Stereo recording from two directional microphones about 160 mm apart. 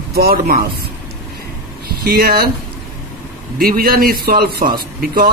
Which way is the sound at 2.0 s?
70° right (ahead or behind).